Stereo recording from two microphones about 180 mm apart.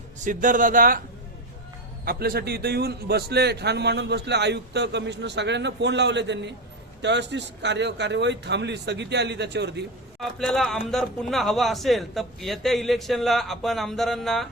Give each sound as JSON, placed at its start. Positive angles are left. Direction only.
{"t": 0.3, "sound": "speech", "side_deg": -45}
{"t": 2.0, "sound": "a man's voice", "side_deg": -60}
{"t": 10.2, "sound": "speech", "side_deg": 0}